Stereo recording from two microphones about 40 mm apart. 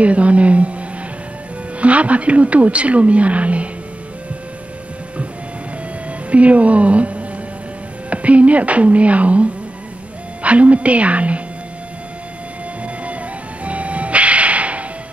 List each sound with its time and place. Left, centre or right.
0.0 s a sound: right
1.8 s speech: right
6.3 s a woman's voice: right
12.8 s music: right